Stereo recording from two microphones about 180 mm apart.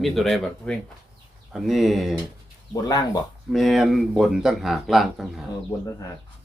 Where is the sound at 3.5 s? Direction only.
Centre (ahead or behind).